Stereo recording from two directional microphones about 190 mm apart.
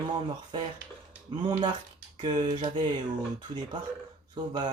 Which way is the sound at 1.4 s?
20° right (ahead or behind).